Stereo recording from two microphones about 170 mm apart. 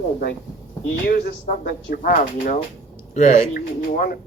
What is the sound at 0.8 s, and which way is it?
Speech, 65° left (ahead or behind).